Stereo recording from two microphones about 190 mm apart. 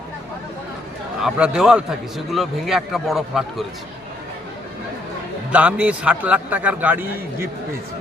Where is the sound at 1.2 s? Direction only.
5° right (ahead or behind).